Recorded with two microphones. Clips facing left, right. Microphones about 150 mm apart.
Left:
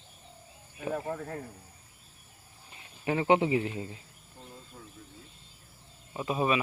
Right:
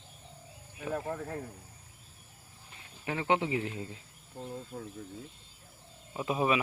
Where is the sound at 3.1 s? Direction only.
10° left (ahead or behind).